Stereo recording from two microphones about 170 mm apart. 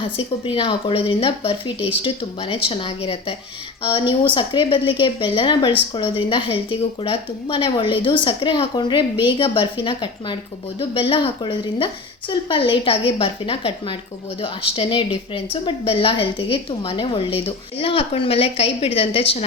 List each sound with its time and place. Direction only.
0.0 s a woman's voice: 30° left (ahead or behind)
1.8 s speech: 10° right (ahead or behind)
2.0 s a woman's voice: 30° left (ahead or behind)
4.4 s a woman's voice: 30° left (ahead or behind)